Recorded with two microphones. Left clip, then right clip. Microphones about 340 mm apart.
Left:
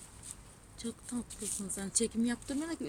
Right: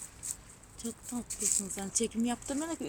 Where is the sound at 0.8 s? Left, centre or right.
Centre.